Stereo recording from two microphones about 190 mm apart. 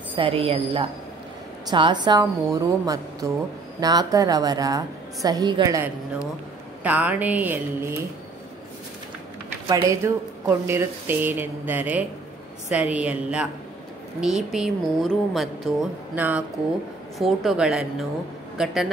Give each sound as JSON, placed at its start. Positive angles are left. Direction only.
{"t": 0.1, "sound": "a woman's voice", "side_deg": -30}
{"t": 6.8, "sound": "a woman's voice", "side_deg": -10}
{"t": 9.7, "sound": "a woman's voice", "side_deg": -20}